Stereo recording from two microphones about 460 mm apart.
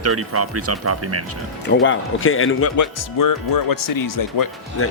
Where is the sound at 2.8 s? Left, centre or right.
Left.